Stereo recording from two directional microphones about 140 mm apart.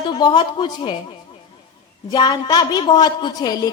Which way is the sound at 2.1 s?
30° left (ahead or behind).